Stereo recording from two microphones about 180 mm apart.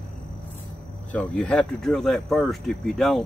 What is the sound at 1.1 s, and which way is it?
Speech, 5° left (ahead or behind).